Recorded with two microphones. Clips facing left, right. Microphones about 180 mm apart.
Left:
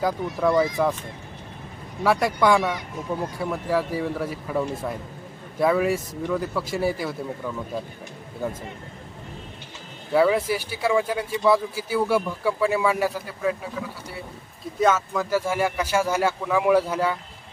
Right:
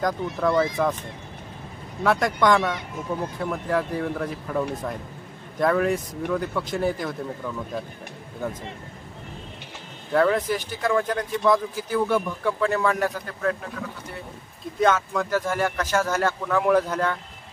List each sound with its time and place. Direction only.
0.0 s speech: 5° left (ahead or behind)
2.0 s speech: 5° left (ahead or behind)
10.1 s speech: 5° left (ahead or behind)
14.8 s speech: 5° left (ahead or behind)